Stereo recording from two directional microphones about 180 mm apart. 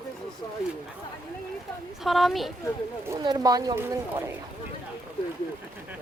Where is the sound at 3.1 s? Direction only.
20° right (ahead or behind).